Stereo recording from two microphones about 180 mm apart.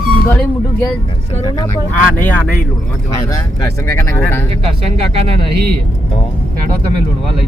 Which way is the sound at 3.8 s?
15° left (ahead or behind).